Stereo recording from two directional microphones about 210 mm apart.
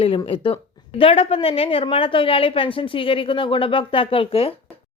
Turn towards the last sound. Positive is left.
turn(degrees=25)  # may be behind; listen again after turning